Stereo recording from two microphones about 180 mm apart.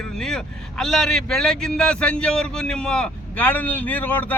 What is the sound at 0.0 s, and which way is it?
A man's voice, 5° left (ahead or behind).